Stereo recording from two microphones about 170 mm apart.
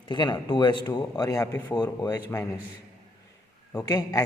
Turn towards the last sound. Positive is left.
turn(degrees=20)  # may be behind; listen again after turning